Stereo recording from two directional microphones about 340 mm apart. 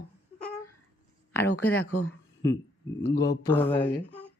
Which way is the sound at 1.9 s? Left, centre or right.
Left.